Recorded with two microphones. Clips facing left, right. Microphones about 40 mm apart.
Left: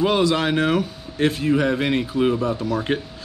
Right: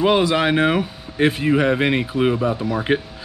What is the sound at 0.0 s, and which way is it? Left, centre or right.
Speech, centre.